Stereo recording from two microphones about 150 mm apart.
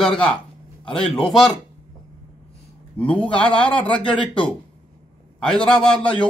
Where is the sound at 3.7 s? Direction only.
35° left (ahead or behind).